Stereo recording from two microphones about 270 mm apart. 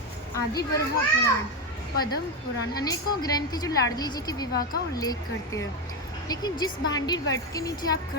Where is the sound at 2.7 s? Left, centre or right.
Centre.